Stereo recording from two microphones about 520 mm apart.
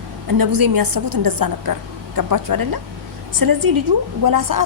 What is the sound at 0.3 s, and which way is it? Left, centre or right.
A woman's voice, right.